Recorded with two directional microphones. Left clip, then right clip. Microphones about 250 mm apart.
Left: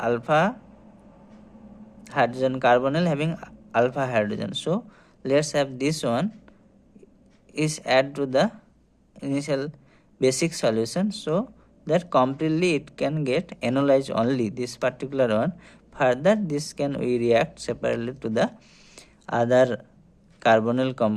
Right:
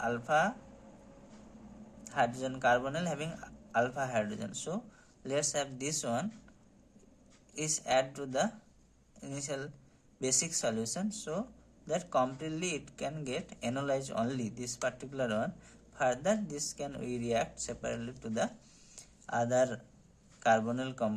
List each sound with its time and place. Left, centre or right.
0.0 s speech: left
2.0 s speech: left
7.5 s speech: left
18.9 s a sound: left
20.4 s speech: left